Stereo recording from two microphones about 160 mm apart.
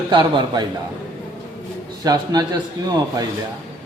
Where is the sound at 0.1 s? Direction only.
30° right (ahead or behind).